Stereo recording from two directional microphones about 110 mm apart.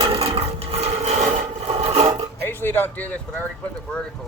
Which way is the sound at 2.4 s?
20° left (ahead or behind).